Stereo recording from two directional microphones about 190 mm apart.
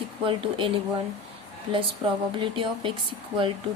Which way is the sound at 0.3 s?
25° right (ahead or behind).